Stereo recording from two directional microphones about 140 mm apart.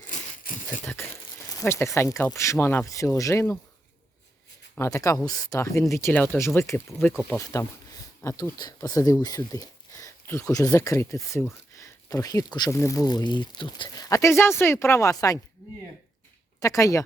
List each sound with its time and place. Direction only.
0.9 s a sound: 20° left (ahead or behind)
2.3 s speech: 20° left (ahead or behind)
4.7 s speech: 20° left (ahead or behind)
16.6 s speech: 25° left (ahead or behind)